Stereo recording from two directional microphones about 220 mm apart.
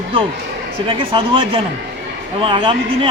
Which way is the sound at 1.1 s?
25° right (ahead or behind).